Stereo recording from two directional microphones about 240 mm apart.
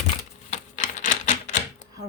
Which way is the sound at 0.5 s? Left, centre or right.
Left.